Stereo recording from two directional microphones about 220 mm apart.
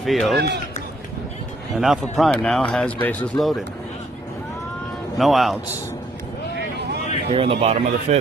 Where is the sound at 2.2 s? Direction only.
Centre (ahead or behind).